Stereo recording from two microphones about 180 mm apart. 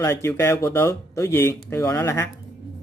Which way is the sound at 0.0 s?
15° left (ahead or behind).